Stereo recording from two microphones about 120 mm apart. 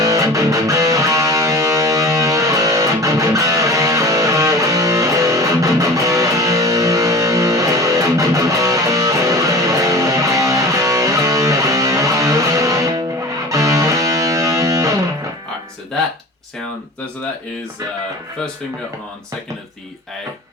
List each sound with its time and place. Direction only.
0.0 s music: 30° right (ahead or behind)